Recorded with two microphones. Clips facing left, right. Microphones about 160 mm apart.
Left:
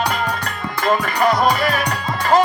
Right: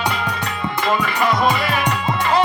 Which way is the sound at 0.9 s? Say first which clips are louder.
Left 3 dB; 45° left (ahead or behind).